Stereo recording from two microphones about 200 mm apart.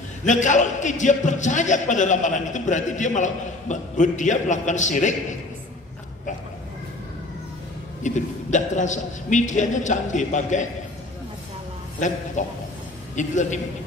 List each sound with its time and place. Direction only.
0.2 s a man's voice: 40° left (ahead or behind)
8.0 s a man's voice: 35° left (ahead or behind)
12.4 s a man's voice: 35° left (ahead or behind)